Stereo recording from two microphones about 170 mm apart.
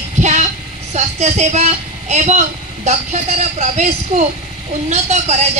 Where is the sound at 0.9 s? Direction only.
45° right (ahead or behind).